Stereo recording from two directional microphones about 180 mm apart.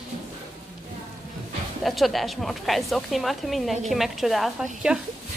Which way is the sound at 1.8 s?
Centre (ahead or behind).